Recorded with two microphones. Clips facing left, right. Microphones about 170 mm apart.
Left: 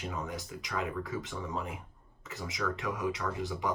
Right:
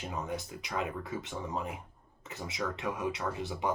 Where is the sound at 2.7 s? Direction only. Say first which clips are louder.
Even; 25° right (ahead or behind).